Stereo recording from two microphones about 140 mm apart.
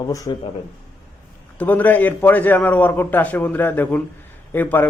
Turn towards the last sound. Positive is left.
turn(degrees=15)  # may be behind; listen again after turning